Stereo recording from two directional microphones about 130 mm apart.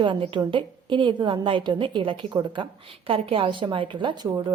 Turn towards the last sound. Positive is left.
turn(degrees=-30)  # may be behind; listen again after turning